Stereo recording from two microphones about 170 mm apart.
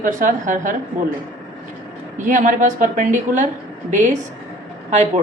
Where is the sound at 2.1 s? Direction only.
45° right (ahead or behind).